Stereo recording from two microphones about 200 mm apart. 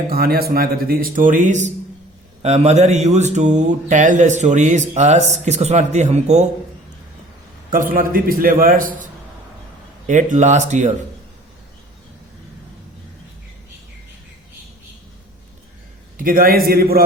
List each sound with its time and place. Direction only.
0.1 s speech: 50° right (ahead or behind); by 6.5 s 35° right (ahead or behind)
7.7 s speech: 45° right (ahead or behind)
10.1 s speech: 35° right (ahead or behind)
16.1 s speech: 45° right (ahead or behind)